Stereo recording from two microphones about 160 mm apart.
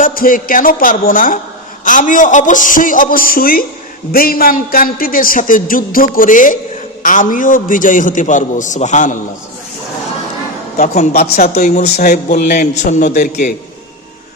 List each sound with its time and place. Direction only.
0.0 s a man's voice: 60° left (ahead or behind)
10.8 s a man's voice: 50° left (ahead or behind)
11.1 s speech: 70° left (ahead or behind)
11.4 s a man's voice: 45° left (ahead or behind)
12.3 s a man's voice: 60° left (ahead or behind)